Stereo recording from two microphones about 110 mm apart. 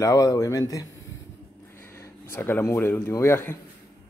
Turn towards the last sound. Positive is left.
turn(degrees=25)  # may be behind; listen again after turning